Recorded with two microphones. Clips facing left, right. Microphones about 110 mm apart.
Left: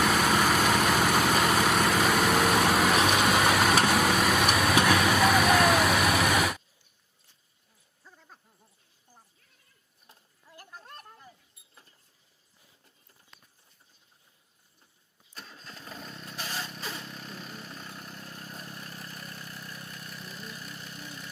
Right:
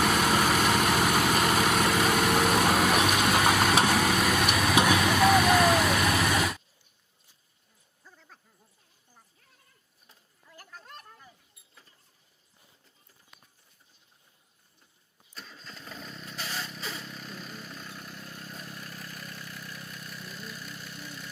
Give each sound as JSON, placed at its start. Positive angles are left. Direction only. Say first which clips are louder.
{"t": 0.0, "sound": "vehicle", "louder": "even", "side_deg": 0}
{"t": 8.0, "sound": "a sound", "louder": "left 1 dB", "side_deg": 10}
{"t": 10.8, "sound": "a sound", "louder": "even", "side_deg": 35}
{"t": 15.4, "sound": "engine starting", "louder": "even", "side_deg": 45}
{"t": 16.6, "sound": "vehicle", "louder": "even", "side_deg": 40}
{"t": 20.0, "sound": "vehicle", "louder": "even", "side_deg": 0}
{"t": 20.5, "sound": "engine", "louder": "even", "side_deg": 5}
{"t": 20.7, "sound": "engine", "louder": "even", "side_deg": 40}